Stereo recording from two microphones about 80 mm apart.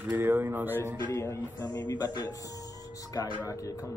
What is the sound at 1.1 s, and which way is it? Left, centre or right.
Speech, left.